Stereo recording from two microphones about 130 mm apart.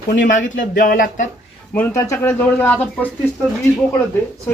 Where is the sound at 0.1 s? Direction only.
85° left.